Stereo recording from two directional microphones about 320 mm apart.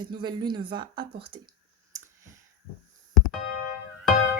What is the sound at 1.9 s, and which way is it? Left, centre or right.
Clicking, centre.